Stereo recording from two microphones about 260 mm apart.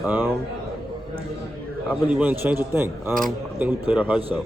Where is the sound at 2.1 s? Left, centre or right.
Centre.